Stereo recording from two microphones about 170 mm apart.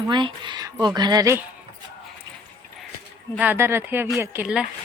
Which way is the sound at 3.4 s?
10° right (ahead or behind).